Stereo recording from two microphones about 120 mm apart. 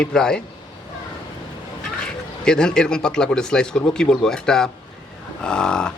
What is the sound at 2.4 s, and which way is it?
Speech, 5° left (ahead or behind).